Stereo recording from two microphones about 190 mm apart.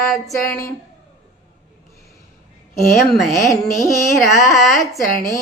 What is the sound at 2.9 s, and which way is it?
Speech, centre (ahead or behind).